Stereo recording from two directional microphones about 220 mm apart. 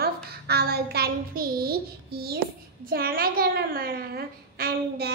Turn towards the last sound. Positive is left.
turn(degrees=-45)  # may be behind; listen again after turning